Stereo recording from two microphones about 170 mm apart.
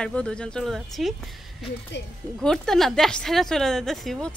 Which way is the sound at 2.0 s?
90° left.